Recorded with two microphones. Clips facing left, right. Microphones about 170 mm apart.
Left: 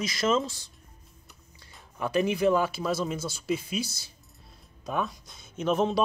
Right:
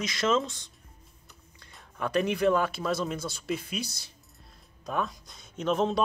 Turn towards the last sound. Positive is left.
turn(degrees=5)  # may be behind; listen again after turning